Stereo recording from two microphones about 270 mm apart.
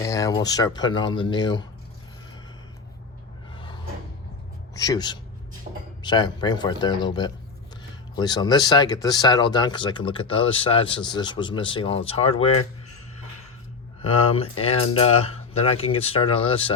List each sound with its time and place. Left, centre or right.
0.0 s speech: centre
3.5 s a sound: centre
4.7 s speech: centre
14.0 s speech: left